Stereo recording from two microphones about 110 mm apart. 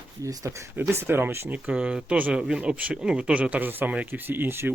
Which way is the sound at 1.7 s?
10° right (ahead or behind).